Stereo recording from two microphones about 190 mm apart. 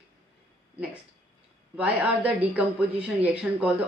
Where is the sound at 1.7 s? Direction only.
10° right (ahead or behind).